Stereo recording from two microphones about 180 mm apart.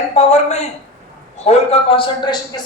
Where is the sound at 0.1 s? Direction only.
40° left (ahead or behind).